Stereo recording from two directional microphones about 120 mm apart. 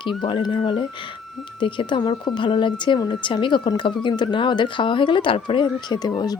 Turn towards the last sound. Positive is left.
turn(degrees=35)  # may be behind; listen again after turning